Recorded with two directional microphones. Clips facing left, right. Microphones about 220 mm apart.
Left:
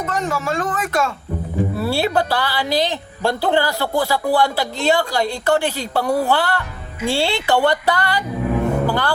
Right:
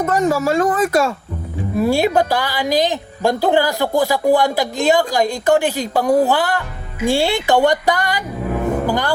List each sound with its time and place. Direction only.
0.0 s speech: 40° right (ahead or behind)
1.7 s speech: 15° right (ahead or behind)